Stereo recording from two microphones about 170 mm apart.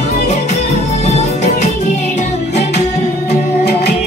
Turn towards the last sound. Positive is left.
turn(degrees=70)  # may be behind; listen again after turning